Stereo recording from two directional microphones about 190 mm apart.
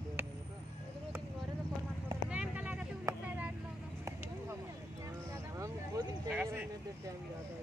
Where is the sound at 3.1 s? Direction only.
20° right (ahead or behind).